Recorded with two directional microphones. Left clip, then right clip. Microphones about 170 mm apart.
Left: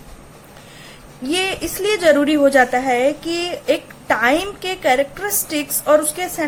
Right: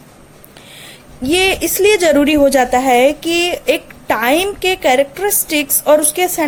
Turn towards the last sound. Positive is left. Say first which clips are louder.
# right 4 dB
turn(degrees=-40)  # may be behind; listen again after turning